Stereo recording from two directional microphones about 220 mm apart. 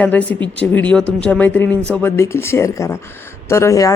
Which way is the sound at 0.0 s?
5° left (ahead or behind).